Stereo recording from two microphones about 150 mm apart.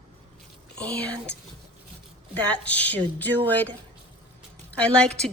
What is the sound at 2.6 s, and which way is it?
Speech, 10° left (ahead or behind).